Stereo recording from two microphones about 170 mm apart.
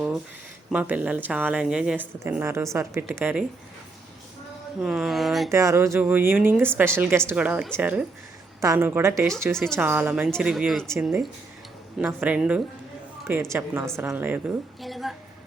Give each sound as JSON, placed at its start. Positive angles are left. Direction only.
{"t": 0.7, "sound": "speech", "side_deg": -10}
{"t": 4.8, "sound": "speech", "side_deg": 0}
{"t": 5.5, "sound": "speech", "side_deg": -15}
{"t": 9.5, "sound": "speech", "side_deg": 5}
{"t": 9.7, "sound": "speech", "side_deg": -10}
{"t": 14.8, "sound": "speech", "side_deg": 0}